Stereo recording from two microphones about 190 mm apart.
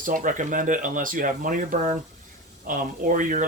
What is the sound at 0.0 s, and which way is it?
Speech, 45° right (ahead or behind).